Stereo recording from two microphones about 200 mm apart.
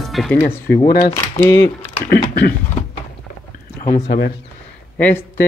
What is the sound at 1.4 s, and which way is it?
Speech, 10° left (ahead or behind).